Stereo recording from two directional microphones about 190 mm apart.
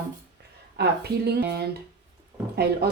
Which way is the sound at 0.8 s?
60° right (ahead or behind).